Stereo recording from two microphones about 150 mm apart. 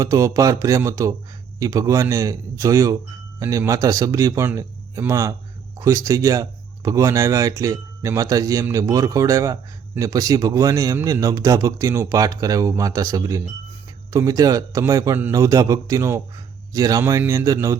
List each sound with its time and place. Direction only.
0.0 s speech: 20° right (ahead or behind)